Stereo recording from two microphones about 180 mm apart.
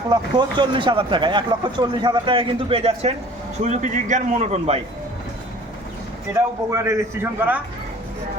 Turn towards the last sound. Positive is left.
turn(degrees=-10)  # may be behind; listen again after turning